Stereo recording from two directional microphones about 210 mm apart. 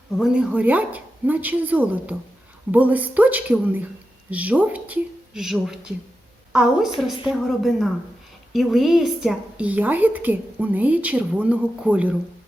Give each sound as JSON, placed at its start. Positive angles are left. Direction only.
{"t": 0.2, "sound": "a woman's voice", "side_deg": -5}